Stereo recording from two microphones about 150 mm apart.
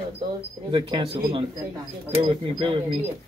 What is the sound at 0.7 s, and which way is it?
Speech, 30° right (ahead or behind).